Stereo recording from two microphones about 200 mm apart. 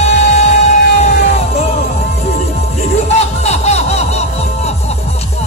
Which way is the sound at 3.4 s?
35° left (ahead or behind).